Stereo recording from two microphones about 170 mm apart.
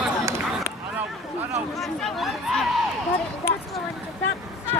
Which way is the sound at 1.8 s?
Centre (ahead or behind).